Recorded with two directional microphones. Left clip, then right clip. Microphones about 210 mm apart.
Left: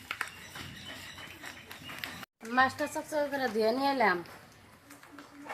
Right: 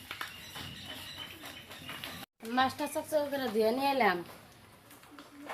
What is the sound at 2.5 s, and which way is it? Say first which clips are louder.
Speech: left 3 dB; 5° right (ahead or behind).